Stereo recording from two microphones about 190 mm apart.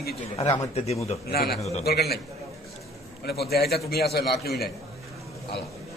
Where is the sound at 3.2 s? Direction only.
55° left (ahead or behind).